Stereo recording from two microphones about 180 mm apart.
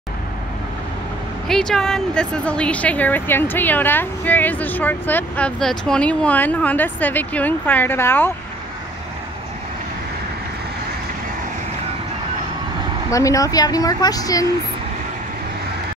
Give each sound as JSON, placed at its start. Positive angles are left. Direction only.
{"t": 1.5, "sound": "speech", "side_deg": 5}
{"t": 13.1, "sound": "a woman's voice", "side_deg": 20}